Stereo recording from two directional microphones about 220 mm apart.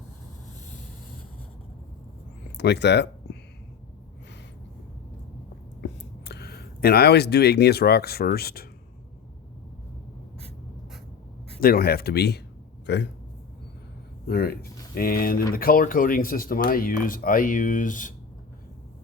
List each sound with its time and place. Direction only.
2.6 s speech: 50° left (ahead or behind)
5.8 s speech: 50° left (ahead or behind)
11.6 s speech: 45° left (ahead or behind)
12.8 s a sound: 50° left (ahead or behind)
14.3 s speech: 45° left (ahead or behind)